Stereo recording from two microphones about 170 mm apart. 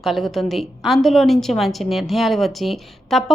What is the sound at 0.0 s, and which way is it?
A woman's voice, centre (ahead or behind).